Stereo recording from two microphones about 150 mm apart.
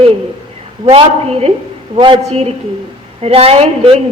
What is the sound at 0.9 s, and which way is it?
A woman's voice, 40° right (ahead or behind).